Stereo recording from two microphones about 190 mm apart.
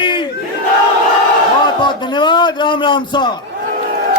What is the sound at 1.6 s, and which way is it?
A man's voice, 25° left (ahead or behind).